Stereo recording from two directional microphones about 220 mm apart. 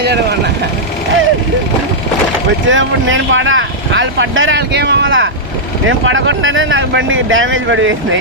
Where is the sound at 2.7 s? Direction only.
60° right (ahead or behind).